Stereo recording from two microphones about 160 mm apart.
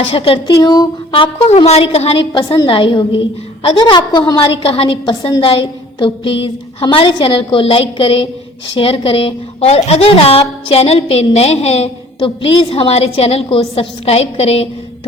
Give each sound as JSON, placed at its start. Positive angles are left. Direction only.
{"t": 0.1, "sound": "a woman's voice", "side_deg": 35}